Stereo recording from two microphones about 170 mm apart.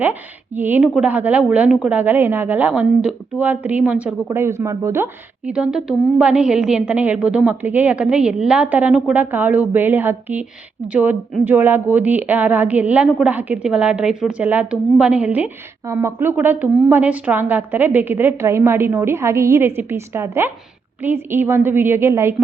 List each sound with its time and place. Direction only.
0.0 s a woman's voice: 10° right (ahead or behind)
5.5 s a woman's voice: 5° right (ahead or behind)